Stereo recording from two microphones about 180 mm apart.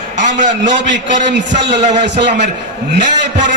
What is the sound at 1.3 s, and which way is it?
A man's voice, 75° right (ahead or behind).